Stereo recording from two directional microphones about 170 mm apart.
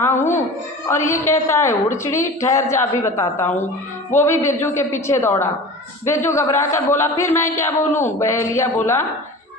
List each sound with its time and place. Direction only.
0.9 s a woman's voice: 15° left (ahead or behind)